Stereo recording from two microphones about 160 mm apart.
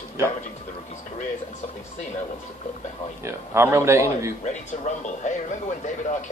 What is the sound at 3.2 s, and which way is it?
A man's voice, 15° right (ahead or behind).